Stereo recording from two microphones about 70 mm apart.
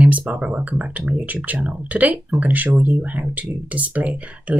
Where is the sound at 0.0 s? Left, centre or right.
Right.